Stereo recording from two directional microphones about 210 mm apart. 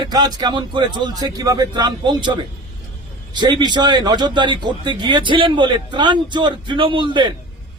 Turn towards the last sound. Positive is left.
turn(degrees=-25)  # may be behind; listen again after turning